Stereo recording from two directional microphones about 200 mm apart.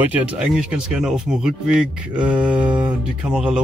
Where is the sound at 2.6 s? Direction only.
20° right (ahead or behind).